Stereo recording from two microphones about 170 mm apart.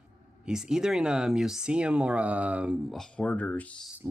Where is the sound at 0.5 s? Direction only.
5° right (ahead or behind).